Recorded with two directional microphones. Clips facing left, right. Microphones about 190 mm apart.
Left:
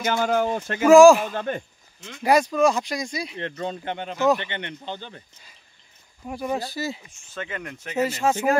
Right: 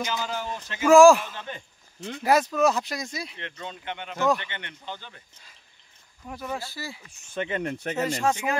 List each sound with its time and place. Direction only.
0.0 s speech: 55° left (ahead or behind)
0.8 s speech: centre (ahead or behind)
1.2 s a man's voice: 55° left (ahead or behind)
2.0 s speech: 35° right (ahead or behind)
2.2 s speech: 5° right (ahead or behind)
3.3 s speech: 40° left (ahead or behind)
4.4 s a man's voice: 20° left (ahead or behind)
6.2 s a man's voice: 15° left (ahead or behind)
7.3 s speech: 25° right (ahead or behind)
7.9 s speech: 5° left (ahead or behind)